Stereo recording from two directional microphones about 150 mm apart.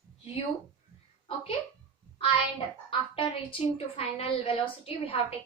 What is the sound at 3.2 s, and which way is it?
A woman's voice, 35° left (ahead or behind).